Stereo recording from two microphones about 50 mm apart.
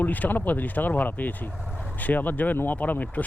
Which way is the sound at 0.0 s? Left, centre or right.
Left.